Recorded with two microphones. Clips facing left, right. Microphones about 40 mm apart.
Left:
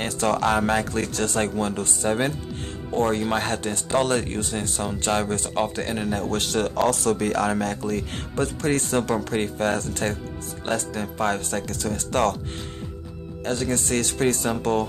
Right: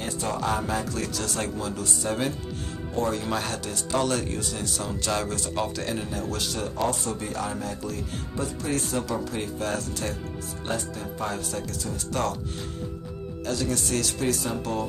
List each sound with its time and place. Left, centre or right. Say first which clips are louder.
0.0 s speech: left 6 dB; left
0.9 s speech: left 5 dB; left
6.0 s speech: left 5 dB; left
7.8 s speech: left 5 dB; left
10.7 s speech: left 5 dB; left
13.5 s speech: left 3 dB; left